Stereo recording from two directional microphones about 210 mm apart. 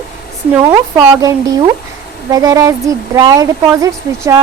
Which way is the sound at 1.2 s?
15° right (ahead or behind).